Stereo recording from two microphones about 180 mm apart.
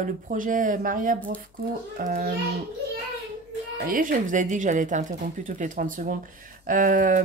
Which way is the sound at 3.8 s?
50° right (ahead or behind).